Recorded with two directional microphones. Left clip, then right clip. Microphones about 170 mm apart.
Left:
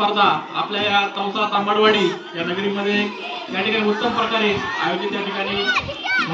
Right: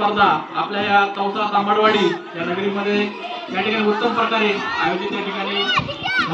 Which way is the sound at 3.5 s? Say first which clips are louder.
Right 1 dB; 35° left (ahead or behind).